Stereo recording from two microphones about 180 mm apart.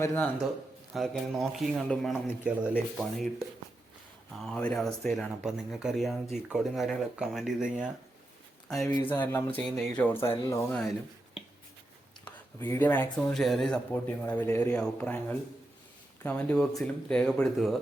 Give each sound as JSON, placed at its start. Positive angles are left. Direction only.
{"t": 0.0, "sound": "speech", "side_deg": 10}
{"t": 0.9, "sound": "speech", "side_deg": 0}
{"t": 4.4, "sound": "speech", "side_deg": 5}
{"t": 10.0, "sound": "speech", "side_deg": 15}
{"t": 12.5, "sound": "speech", "side_deg": 15}